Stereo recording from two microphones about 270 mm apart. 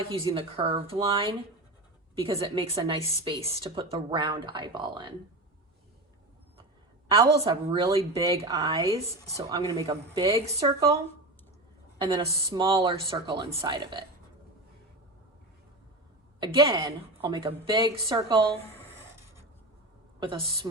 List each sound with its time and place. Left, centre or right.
0.0 s a woman's voice: centre
7.2 s a woman's voice: centre
16.4 s a woman's voice: centre
20.1 s a woman's voice: centre